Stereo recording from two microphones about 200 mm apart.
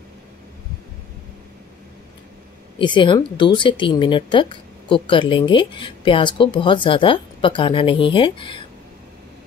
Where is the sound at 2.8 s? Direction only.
25° left (ahead or behind).